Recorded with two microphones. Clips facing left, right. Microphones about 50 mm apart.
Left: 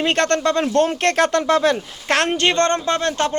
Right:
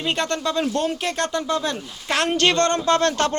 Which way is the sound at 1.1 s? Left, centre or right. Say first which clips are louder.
Left 7 dB; left.